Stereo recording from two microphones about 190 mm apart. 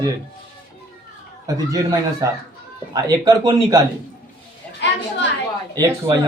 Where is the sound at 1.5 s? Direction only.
20° right (ahead or behind).